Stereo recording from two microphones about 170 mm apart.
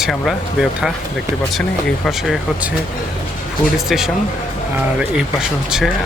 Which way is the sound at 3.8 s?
Centre (ahead or behind).